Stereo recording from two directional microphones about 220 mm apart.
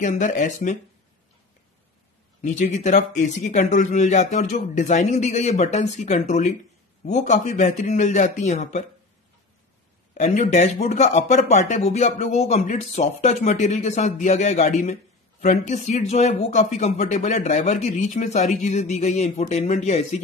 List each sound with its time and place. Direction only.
0.0 s speech: 35° left (ahead or behind)
2.4 s speech: 35° left (ahead or behind)
10.1 s speech: 30° left (ahead or behind)